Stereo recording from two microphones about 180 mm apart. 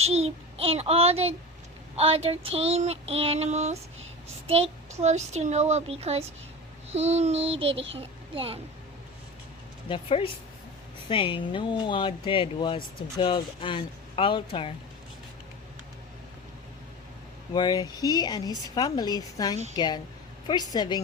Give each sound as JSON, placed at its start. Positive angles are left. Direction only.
{"t": 0.0, "sound": "child singing", "side_deg": -35}
{"t": 7.9, "sound": "a woman's voice", "side_deg": -30}
{"t": 9.9, "sound": "speech", "side_deg": 30}
{"t": 17.5, "sound": "speech", "side_deg": 25}